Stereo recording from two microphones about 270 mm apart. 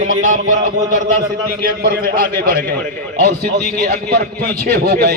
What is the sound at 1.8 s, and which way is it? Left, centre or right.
Speech, right.